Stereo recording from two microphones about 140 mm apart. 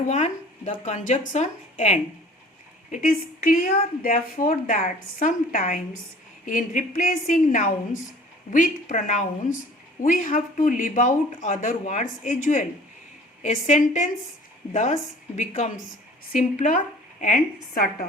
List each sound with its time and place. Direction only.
0.1 s speech: 55° left (ahead or behind)
2.9 s a woman's voice: 75° left (ahead or behind)